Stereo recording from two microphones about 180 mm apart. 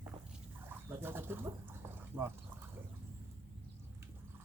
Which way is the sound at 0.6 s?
10° right (ahead or behind).